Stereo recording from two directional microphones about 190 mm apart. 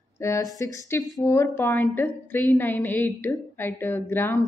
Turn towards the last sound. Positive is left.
turn(degrees=15)  # may be behind; listen again after turning